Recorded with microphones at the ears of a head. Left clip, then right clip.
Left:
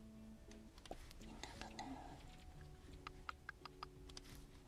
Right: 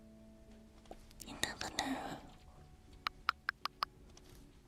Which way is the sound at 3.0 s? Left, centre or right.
Right.